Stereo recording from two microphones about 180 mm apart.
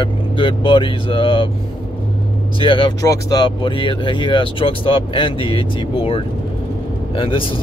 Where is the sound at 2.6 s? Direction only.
25° left (ahead or behind).